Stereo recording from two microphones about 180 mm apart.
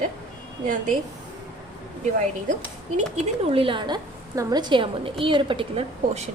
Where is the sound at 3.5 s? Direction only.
30° right (ahead or behind).